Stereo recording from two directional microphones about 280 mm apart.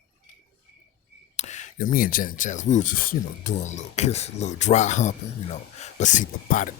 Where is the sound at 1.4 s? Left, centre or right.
Left.